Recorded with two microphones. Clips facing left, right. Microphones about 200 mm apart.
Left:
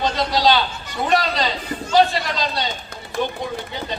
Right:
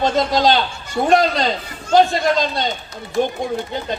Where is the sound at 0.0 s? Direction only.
50° right (ahead or behind).